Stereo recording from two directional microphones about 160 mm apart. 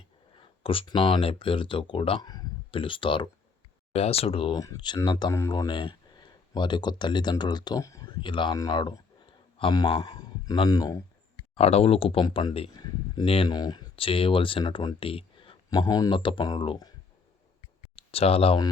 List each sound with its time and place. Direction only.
0.3 s speech: 35° left (ahead or behind)
4.5 s a man's voice: 20° left (ahead or behind)
11.5 s speech: 40° left (ahead or behind)
17.9 s speech: 40° left (ahead or behind)